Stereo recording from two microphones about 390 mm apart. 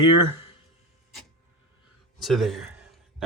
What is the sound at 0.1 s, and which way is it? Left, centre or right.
Speech, right.